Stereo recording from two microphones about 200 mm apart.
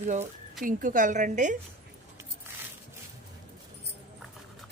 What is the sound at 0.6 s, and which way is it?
Speech, 45° right (ahead or behind).